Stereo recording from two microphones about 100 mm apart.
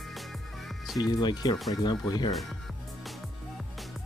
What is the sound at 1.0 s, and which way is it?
Speech, 45° left (ahead or behind).